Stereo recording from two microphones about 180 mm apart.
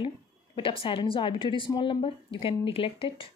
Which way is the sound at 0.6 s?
30° left (ahead or behind).